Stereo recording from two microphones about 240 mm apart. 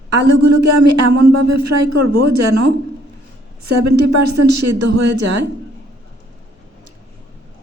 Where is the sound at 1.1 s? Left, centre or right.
Right.